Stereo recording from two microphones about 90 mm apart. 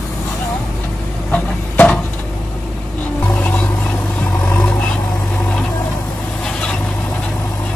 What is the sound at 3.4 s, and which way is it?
Music, 15° left (ahead or behind).